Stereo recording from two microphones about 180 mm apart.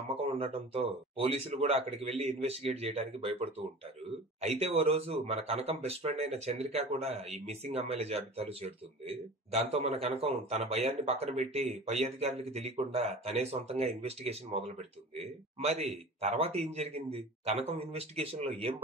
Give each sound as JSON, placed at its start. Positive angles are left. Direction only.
{"t": 0.1, "sound": "speech", "side_deg": -35}
{"t": 16.2, "sound": "speech", "side_deg": -35}